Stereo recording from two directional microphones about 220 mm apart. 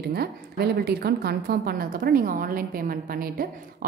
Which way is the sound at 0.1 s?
45° right (ahead or behind).